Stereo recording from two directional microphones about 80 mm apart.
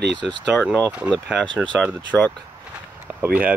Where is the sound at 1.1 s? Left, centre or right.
Centre.